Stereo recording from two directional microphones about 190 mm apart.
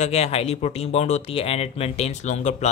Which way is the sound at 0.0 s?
35° left (ahead or behind).